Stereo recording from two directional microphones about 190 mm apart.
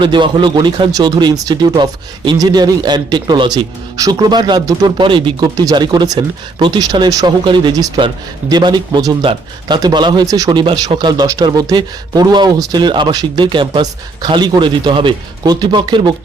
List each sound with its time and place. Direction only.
0.0 s speech: 25° right (ahead or behind)